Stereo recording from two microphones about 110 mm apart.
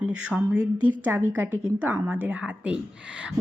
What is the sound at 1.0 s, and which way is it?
A woman's voice, 20° right (ahead or behind).